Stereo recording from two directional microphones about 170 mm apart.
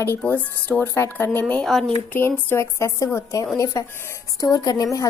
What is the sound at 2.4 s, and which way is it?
A woman's voice, 15° left (ahead or behind).